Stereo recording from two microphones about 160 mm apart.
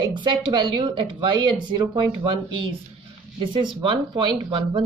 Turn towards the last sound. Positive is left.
turn(degrees=-30)  # may be behind; listen again after turning